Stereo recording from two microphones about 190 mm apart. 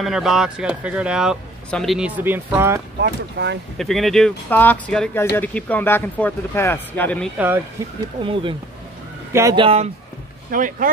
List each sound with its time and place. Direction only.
0.0 s speech: centre (ahead or behind)
3.0 s speech: 65° right (ahead or behind)
3.7 s speech: centre (ahead or behind)
7.3 s speech: 10° right (ahead or behind)
8.2 s speech: 25° right (ahead or behind)
9.3 s speech: 15° right (ahead or behind)
9.6 s speech: 30° right (ahead or behind)
10.5 s speech: 45° right (ahead or behind)